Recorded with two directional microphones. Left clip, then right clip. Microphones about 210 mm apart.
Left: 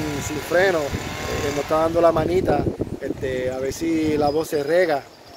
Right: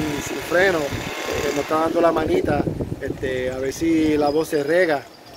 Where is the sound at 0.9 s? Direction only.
40° right (ahead or behind).